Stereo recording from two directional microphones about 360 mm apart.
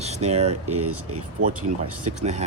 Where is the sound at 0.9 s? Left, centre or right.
Right.